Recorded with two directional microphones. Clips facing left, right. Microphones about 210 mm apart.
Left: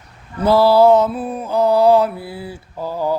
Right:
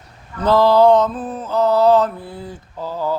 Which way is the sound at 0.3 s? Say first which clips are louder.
Left 1 dB; 10° left (ahead or behind).